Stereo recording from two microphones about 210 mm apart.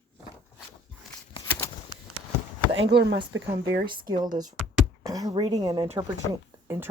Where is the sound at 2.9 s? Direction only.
55° right (ahead or behind).